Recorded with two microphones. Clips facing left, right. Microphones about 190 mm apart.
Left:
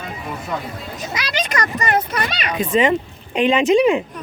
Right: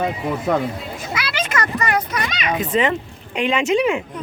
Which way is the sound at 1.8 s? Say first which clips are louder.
Left 1 dB; 25° left (ahead or behind).